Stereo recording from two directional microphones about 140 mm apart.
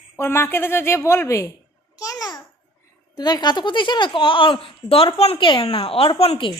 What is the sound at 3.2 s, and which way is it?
Speech, 30° left (ahead or behind).